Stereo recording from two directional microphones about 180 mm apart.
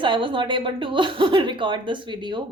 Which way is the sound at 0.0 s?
30° right (ahead or behind).